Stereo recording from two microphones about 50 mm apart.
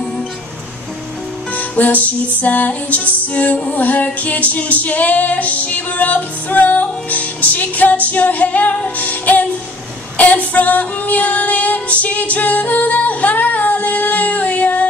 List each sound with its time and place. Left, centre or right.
1.5 s female singing: left